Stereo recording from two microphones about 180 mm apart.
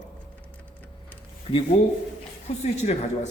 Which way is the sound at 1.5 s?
30° left (ahead or behind).